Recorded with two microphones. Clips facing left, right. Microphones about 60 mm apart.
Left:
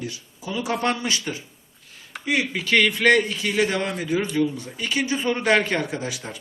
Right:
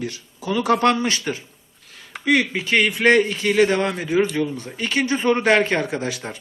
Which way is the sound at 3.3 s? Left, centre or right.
Right.